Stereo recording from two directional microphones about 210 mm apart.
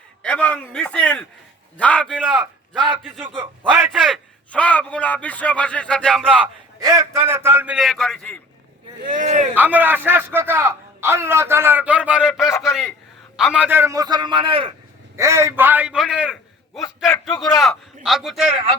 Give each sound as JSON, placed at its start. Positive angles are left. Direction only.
{"t": 0.2, "sound": "a man's voice", "side_deg": 5}
{"t": 2.3, "sound": "a man's voice", "side_deg": -5}
{"t": 4.1, "sound": "speech", "side_deg": 5}
{"t": 6.7, "sound": "a man's voice", "side_deg": -15}
{"t": 9.1, "sound": "speech", "side_deg": -40}
{"t": 9.6, "sound": "a man's voice", "side_deg": -10}
{"t": 15.1, "sound": "a man's voice", "side_deg": -15}